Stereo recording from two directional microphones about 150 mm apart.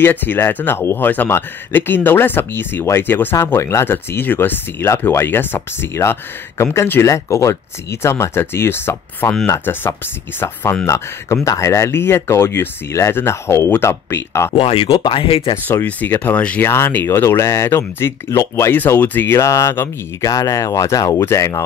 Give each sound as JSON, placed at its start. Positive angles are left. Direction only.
{"t": 0.0, "sound": "speech", "side_deg": 15}
{"t": 14.5, "sound": "speech", "side_deg": 40}
{"t": 15.6, "sound": "speech", "side_deg": 10}